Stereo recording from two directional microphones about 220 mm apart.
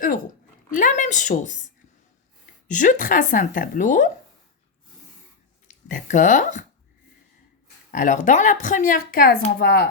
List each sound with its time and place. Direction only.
0.7 s speech: 35° left (ahead or behind)
2.6 s speech: 35° left (ahead or behind)
5.6 s speech: 35° left (ahead or behind)
7.9 s speech: 35° left (ahead or behind)